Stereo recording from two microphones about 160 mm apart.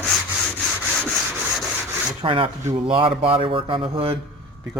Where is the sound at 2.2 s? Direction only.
30° right (ahead or behind).